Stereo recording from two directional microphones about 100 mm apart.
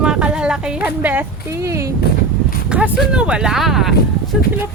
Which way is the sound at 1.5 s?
30° right (ahead or behind).